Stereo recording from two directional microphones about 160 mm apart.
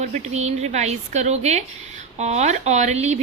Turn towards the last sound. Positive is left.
turn(degrees=-45)  # may be behind; listen again after turning